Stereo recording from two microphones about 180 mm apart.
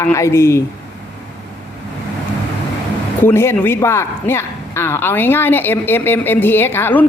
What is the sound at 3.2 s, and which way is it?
A man's voice, 15° left (ahead or behind).